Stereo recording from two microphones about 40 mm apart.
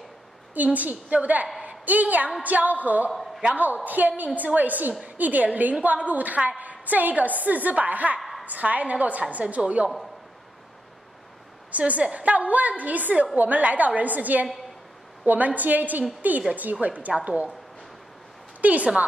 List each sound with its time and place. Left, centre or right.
0.7 s a woman's voice: right
3.1 s a woman's voice: centre
3.5 s a woman's voice: right
8.2 s a sound: centre
8.5 s a woman's voice: right
11.8 s a woman's voice: right
17.1 s a woman's voice: right
18.6 s a woman's voice: right